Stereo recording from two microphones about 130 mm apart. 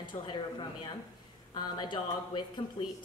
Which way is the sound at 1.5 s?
35° left (ahead or behind).